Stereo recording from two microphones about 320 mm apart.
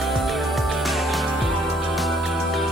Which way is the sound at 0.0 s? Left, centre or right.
Centre.